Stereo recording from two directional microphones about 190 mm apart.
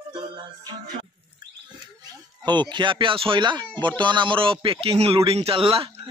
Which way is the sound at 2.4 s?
25° right (ahead or behind).